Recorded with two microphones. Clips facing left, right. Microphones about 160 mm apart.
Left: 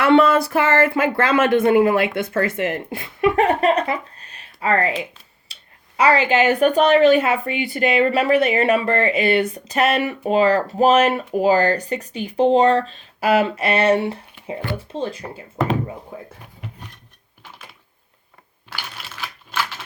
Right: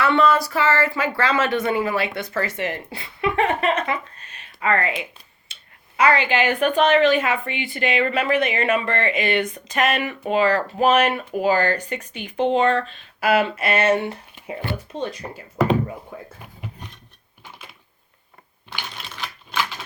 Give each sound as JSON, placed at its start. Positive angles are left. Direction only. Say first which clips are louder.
{"t": 0.0, "sound": "speech", "louder": "left 4 dB", "side_deg": 55}
{"t": 5.5, "sound": "a sound", "louder": "even", "side_deg": 35}
{"t": 6.0, "sound": "a woman's voice", "louder": "left 3 dB", "side_deg": 40}